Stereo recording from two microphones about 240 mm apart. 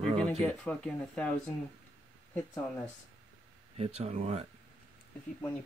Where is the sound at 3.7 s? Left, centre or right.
Right.